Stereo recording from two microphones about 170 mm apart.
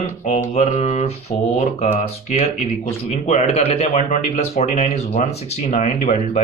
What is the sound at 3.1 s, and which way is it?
Speech, 40° left (ahead or behind).